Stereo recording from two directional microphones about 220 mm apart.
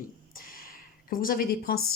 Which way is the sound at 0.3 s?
40° left (ahead or behind).